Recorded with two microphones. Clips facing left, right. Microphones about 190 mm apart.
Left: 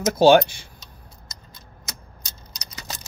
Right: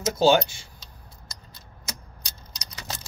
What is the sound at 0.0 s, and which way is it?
Speech, 60° left (ahead or behind).